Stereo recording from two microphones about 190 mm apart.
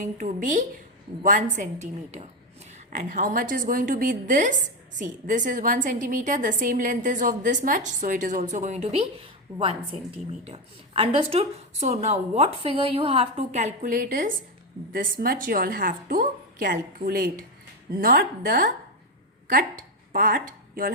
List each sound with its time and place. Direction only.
0.0 s a woman's voice: 40° right (ahead or behind)